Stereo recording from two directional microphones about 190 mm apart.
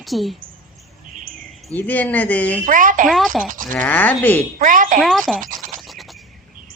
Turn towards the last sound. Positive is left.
turn(degrees=0)  # may be behind; listen again after turning